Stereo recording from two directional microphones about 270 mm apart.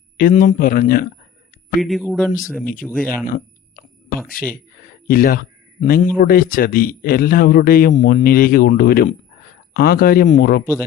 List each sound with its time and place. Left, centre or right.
0.2 s speech: left
1.8 s speech: centre
3.2 s a sound: left
4.3 s speech: left